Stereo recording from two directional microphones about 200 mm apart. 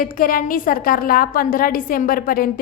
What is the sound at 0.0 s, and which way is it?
A woman's voice, 45° left (ahead or behind).